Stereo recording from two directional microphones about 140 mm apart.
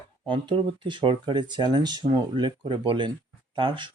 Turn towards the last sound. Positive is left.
turn(degrees=-35)  # may be behind; listen again after turning